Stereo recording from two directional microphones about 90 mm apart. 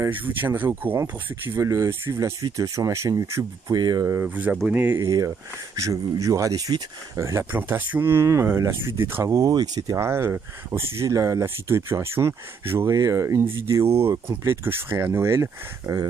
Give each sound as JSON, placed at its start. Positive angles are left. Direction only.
{"t": 0.1, "sound": "speech", "side_deg": -20}
{"t": 1.6, "sound": "speech", "side_deg": -35}
{"t": 3.7, "sound": "speech", "side_deg": -50}
{"t": 4.0, "sound": "speech", "side_deg": -30}
{"t": 4.9, "sound": "speech", "side_deg": -40}
{"t": 7.5, "sound": "speech", "side_deg": -20}
{"t": 9.9, "sound": "speech", "side_deg": -30}